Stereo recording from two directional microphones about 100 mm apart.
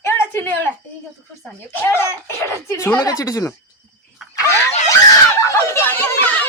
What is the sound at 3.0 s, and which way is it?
Speech, 35° left (ahead or behind).